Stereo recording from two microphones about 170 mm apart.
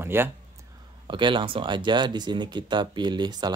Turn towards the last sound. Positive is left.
turn(degrees=-25)  # may be behind; listen again after turning